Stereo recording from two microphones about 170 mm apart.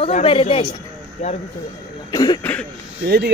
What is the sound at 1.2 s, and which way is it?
Speech, 45° left (ahead or behind).